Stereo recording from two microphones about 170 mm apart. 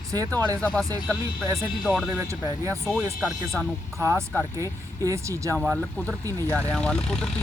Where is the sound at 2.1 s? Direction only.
15° right (ahead or behind).